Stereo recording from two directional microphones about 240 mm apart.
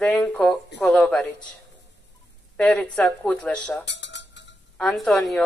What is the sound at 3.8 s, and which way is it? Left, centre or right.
Dishes, left.